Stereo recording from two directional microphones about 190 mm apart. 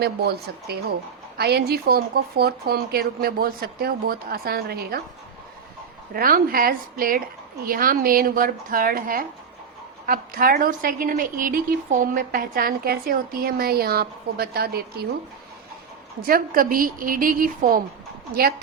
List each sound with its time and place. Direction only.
0.0 s a woman's voice: 60° right (ahead or behind)
6.1 s a woman's voice: 50° right (ahead or behind)
16.2 s a woman's voice: 50° right (ahead or behind)